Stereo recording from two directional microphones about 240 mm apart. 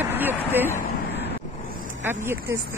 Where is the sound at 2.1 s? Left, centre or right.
Centre.